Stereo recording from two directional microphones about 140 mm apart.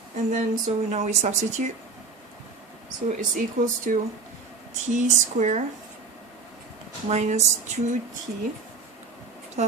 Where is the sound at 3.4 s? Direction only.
70° right (ahead or behind).